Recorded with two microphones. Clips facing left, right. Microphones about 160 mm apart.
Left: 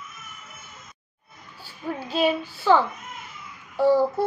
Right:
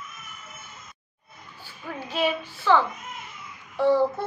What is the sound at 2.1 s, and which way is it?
Speech, 35° left (ahead or behind).